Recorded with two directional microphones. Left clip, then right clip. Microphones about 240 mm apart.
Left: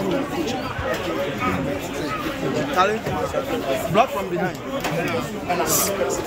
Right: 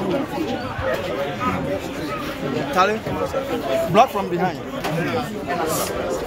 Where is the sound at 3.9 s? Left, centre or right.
Right.